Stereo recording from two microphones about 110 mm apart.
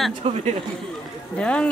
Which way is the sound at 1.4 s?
10° left (ahead or behind).